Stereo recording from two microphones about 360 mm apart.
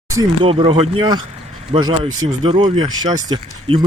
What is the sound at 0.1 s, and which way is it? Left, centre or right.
Speech, centre.